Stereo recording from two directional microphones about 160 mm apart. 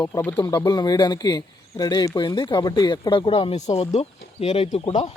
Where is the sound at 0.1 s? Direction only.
15° left (ahead or behind).